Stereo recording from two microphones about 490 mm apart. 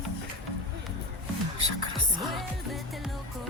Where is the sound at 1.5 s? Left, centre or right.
Right.